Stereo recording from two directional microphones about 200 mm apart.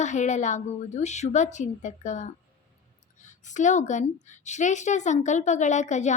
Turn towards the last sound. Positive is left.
turn(degrees=35)  # may be behind; listen again after turning